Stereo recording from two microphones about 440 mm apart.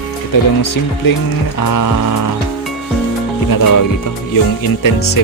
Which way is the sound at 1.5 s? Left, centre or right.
Left.